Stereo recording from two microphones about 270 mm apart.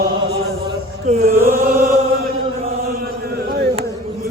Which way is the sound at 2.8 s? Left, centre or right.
Right.